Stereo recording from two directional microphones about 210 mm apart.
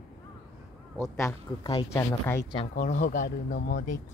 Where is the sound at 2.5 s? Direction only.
35° left (ahead or behind).